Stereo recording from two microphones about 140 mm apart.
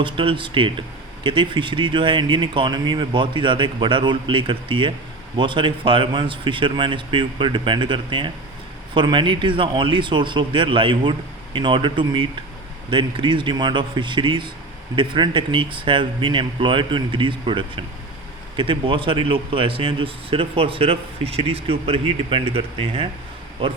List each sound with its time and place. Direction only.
0.0 s speech: 35° right (ahead or behind)